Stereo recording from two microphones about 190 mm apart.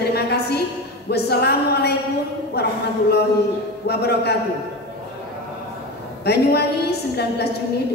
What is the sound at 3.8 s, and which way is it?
Speech, 60° left (ahead or behind).